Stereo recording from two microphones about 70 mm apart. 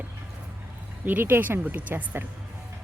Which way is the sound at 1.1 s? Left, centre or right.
Right.